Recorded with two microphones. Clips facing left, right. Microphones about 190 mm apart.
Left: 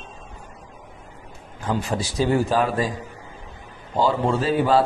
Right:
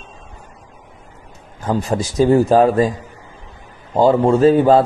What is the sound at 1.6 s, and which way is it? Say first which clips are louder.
Speech: right 6 dB; 45° right (ahead or behind).